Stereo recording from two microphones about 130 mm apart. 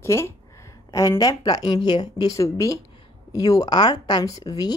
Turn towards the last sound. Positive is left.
turn(degrees=30)  # may be behind; listen again after turning